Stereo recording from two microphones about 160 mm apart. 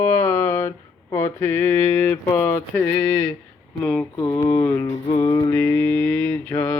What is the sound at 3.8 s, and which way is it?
Mantra, 5° left (ahead or behind).